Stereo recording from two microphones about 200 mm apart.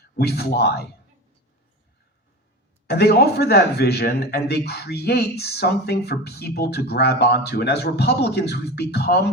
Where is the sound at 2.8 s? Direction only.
55° left (ahead or behind).